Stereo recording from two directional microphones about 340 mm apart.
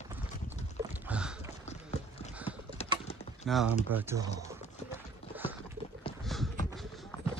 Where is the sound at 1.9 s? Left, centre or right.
Centre.